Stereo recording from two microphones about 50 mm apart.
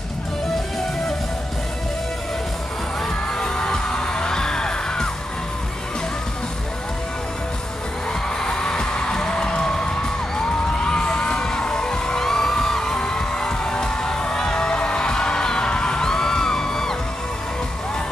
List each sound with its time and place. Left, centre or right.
3.3 s music: centre
8.4 s music: centre